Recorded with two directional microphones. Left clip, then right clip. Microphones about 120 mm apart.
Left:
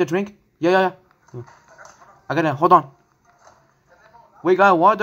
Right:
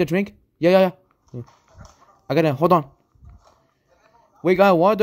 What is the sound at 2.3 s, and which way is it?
Speech, 70° right (ahead or behind).